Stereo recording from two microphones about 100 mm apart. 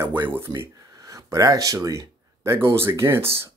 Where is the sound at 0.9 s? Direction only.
35° right (ahead or behind).